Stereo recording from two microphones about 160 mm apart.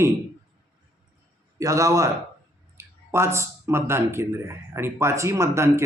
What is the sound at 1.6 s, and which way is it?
A man's voice, 20° right (ahead or behind).